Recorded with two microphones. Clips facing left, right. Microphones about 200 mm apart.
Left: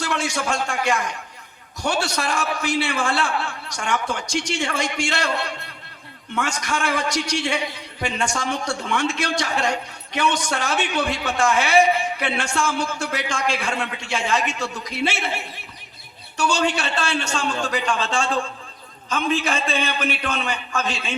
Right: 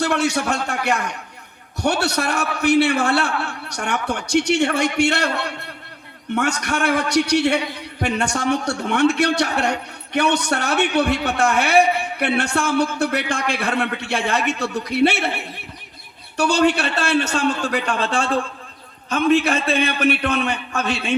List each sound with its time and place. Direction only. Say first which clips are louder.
0.0 s a man's voice: right 5 dB; 60° right (ahead or behind)
16.4 s a man's voice: right 5 dB; 60° right (ahead or behind)